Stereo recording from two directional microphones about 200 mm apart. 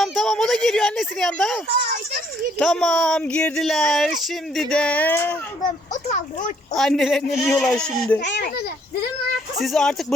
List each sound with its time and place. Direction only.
0.0 s speech: centre (ahead or behind)
5.9 s speech: 40° left (ahead or behind)
6.7 s speech: centre (ahead or behind)
8.2 s a child's voice: 55° left (ahead or behind)
9.6 s speech: centre (ahead or behind)